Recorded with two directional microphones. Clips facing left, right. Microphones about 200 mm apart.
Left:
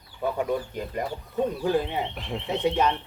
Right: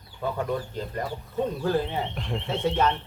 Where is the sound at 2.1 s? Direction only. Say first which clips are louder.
Right 1 dB; centre (ahead or behind).